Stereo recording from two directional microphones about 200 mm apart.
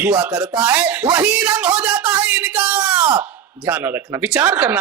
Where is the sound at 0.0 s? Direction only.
10° right (ahead or behind).